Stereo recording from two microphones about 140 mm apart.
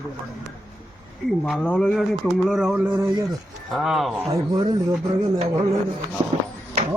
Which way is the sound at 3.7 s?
Centre (ahead or behind).